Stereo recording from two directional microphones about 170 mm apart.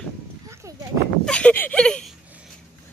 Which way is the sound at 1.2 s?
5° left (ahead or behind).